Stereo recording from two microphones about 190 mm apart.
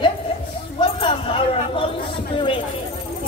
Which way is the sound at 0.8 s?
30° left (ahead or behind).